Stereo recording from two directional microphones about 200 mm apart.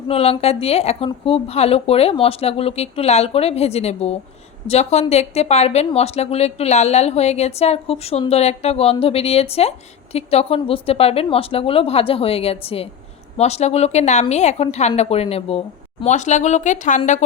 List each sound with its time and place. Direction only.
0.1 s a woman's voice: 30° left (ahead or behind)